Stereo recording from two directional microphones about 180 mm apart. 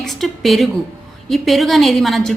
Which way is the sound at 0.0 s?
Centre (ahead or behind).